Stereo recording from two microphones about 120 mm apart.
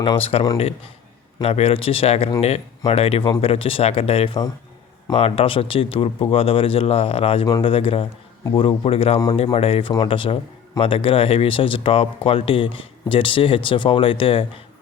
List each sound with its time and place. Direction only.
0.0 s speech: 45° left (ahead or behind)